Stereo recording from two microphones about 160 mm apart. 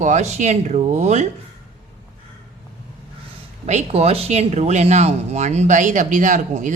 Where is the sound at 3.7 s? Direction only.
45° right (ahead or behind).